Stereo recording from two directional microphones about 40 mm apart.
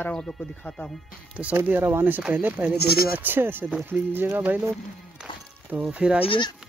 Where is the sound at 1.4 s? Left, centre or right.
Right.